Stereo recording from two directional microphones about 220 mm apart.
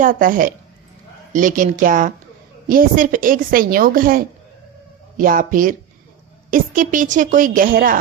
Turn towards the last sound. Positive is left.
turn(degrees=-40)  # may be behind; listen again after turning